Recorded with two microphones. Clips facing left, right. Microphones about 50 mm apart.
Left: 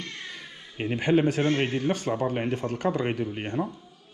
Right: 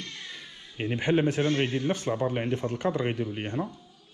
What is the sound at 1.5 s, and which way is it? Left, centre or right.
Speech, left.